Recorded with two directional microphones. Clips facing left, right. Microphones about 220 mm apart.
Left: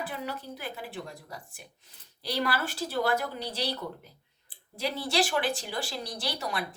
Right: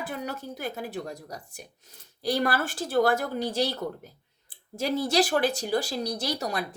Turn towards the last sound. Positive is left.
turn(degrees=-40)  # may be behind; listen again after turning